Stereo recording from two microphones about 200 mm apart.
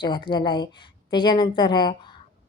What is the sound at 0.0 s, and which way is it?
A woman's voice, 25° left (ahead or behind).